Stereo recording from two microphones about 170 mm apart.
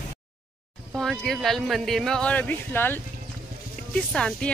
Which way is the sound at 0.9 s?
Centre (ahead or behind).